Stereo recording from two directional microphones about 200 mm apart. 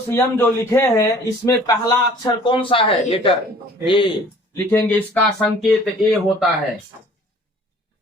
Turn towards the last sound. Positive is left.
turn(degrees=0)  # may be behind; listen again after turning